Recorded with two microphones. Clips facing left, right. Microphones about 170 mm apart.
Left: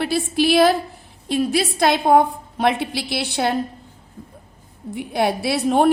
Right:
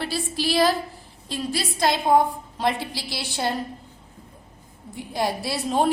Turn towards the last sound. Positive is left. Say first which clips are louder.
# left 6 dB
turn(degrees=65)  # may be behind; listen again after turning